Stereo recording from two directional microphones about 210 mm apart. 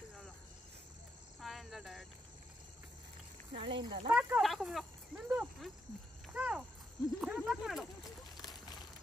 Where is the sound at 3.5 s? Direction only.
25° right (ahead or behind).